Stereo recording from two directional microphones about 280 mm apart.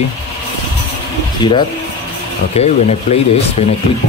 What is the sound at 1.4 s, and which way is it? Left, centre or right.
Speech, centre.